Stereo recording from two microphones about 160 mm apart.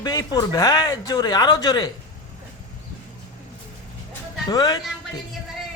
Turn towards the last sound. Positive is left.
turn(degrees=25)  # may be behind; listen again after turning